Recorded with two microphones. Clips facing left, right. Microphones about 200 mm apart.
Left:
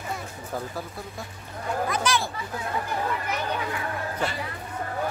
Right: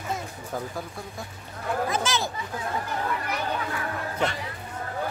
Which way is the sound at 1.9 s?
25° right (ahead or behind).